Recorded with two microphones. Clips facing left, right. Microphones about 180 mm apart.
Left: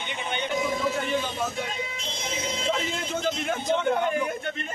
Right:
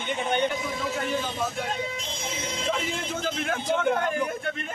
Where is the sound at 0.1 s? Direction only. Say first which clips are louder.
Right 7 dB; 45° right (ahead or behind).